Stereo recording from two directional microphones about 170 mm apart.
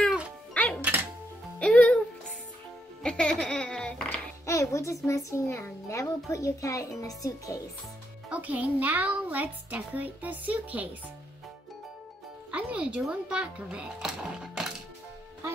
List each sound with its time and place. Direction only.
0.0 s music: 5° right (ahead or behind)
1.6 s music: 5° left (ahead or behind)
3.0 s music: 5° left (ahead or behind)
4.5 s a child's voice: 20° left (ahead or behind)
8.3 s a child's voice: 10° right (ahead or behind)
12.4 s speech: 5° right (ahead or behind)